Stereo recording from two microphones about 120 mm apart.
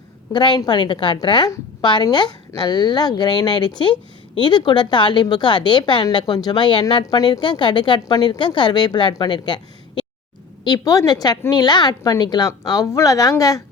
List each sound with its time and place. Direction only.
0.3 s a woman's voice: 40° left (ahead or behind)